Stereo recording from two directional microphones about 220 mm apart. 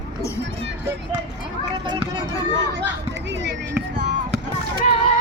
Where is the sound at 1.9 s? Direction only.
20° right (ahead or behind).